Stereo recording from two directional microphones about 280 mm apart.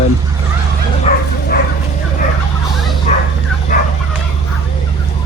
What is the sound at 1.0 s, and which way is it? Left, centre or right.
Bow-wow, left.